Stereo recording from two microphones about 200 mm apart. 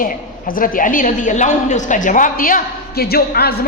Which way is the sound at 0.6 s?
40° left (ahead or behind).